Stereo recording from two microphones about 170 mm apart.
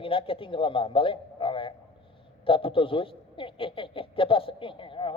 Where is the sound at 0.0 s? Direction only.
30° left (ahead or behind).